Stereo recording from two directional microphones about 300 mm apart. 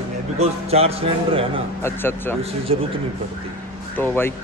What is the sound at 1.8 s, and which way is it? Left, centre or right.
Speech, centre.